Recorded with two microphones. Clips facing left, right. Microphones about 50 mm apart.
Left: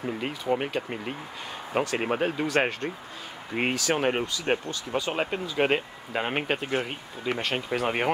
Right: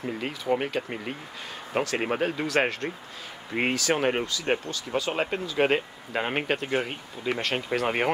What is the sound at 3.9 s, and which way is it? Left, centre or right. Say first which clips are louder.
Speech: even; centre.